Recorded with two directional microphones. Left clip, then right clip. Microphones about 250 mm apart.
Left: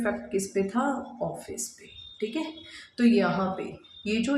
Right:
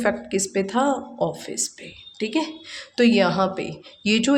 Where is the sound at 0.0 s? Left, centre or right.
Right.